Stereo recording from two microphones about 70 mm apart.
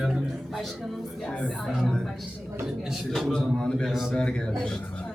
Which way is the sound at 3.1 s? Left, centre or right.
Centre.